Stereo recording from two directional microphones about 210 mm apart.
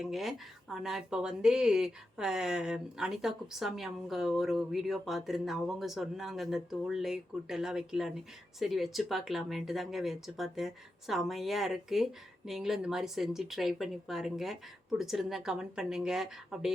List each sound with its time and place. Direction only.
0.0 s speech: centre (ahead or behind)